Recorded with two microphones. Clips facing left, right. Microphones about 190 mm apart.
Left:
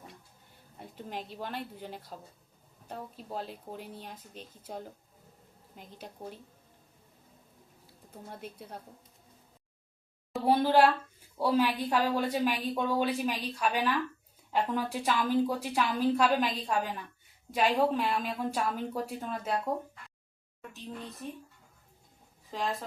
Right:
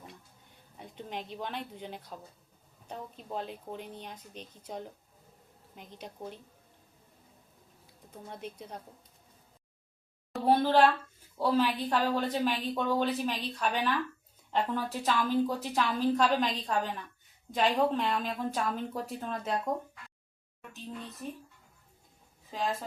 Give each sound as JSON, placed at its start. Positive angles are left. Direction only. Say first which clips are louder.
{"t": 0.8, "sound": "a woman's voice", "louder": "even", "side_deg": 5}
{"t": 8.1, "sound": "a woman's voice", "louder": "right 1 dB", "side_deg": 5}
{"t": 10.4, "sound": "a woman's voice", "louder": "even", "side_deg": 10}
{"t": 22.5, "sound": "a woman's voice", "louder": "even", "side_deg": 0}